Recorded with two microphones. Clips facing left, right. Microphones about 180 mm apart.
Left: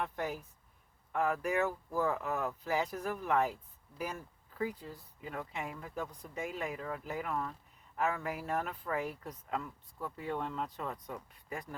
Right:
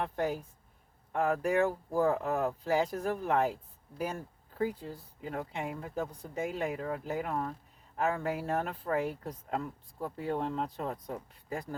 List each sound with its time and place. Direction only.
0.0 s speech: 35° right (ahead or behind)